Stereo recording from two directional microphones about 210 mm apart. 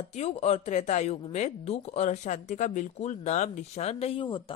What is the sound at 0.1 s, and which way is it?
Speech, 30° left (ahead or behind).